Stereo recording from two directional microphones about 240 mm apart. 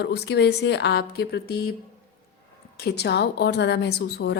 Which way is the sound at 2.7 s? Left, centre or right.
Left.